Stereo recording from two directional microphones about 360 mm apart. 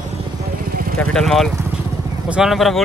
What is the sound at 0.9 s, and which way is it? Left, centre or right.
Speech, centre.